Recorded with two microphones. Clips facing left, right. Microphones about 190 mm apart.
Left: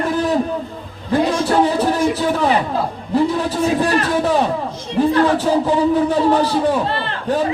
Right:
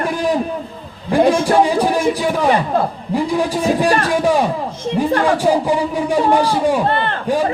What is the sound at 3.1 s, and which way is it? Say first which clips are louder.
Speech: left 1 dB; 10° right (ahead or behind).